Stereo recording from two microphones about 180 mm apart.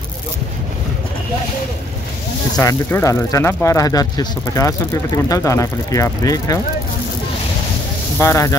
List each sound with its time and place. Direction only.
2.5 s speech: 15° left (ahead or behind)
8.2 s speech: 15° left (ahead or behind)